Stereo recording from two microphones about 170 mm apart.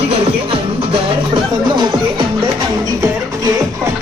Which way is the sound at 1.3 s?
30° right (ahead or behind).